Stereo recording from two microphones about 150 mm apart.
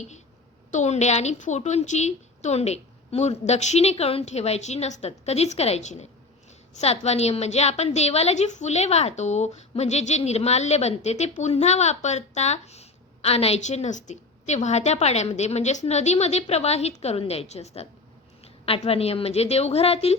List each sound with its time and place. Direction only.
0.7 s a woman's voice: 50° left (ahead or behind)